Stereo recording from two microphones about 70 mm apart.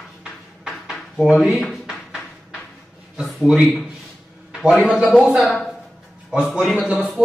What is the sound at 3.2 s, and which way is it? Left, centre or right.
Speech, centre.